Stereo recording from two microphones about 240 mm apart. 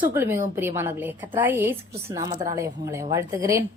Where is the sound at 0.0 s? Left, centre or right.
Centre.